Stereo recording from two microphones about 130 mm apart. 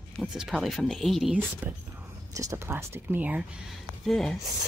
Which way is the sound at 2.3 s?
25° right (ahead or behind).